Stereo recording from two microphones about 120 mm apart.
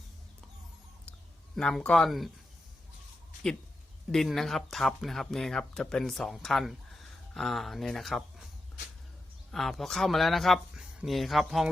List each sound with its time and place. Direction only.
1.5 s speech: 5° left (ahead or behind)
4.1 s speech: centre (ahead or behind)
9.5 s speech: centre (ahead or behind)